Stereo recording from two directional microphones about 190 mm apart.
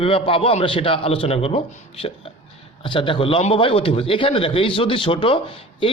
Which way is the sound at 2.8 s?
25° left (ahead or behind).